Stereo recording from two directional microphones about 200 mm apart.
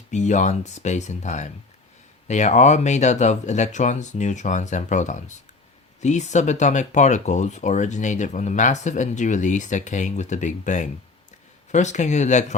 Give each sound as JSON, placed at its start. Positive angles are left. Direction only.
{"t": 0.1, "sound": "speech", "side_deg": 35}